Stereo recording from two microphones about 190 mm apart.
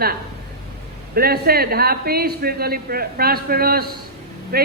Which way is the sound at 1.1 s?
55° right (ahead or behind).